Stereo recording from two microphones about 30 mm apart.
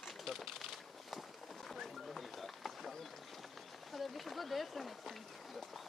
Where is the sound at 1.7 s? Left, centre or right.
Centre.